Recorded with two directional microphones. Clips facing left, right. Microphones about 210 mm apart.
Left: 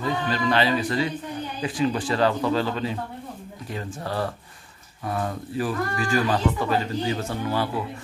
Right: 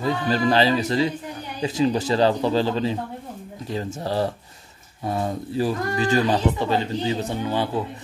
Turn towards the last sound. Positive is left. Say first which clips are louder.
# right 2 dB
turn(degrees=-20)  # may be behind; listen again after turning